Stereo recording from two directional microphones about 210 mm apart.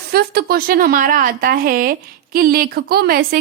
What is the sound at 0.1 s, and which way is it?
A woman's voice, 50° right (ahead or behind).